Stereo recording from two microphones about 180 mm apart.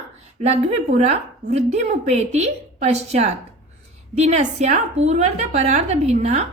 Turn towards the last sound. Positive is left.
turn(degrees=-40)  # may be behind; listen again after turning